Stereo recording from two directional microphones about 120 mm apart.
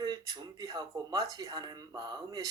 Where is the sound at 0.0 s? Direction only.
35° right (ahead or behind).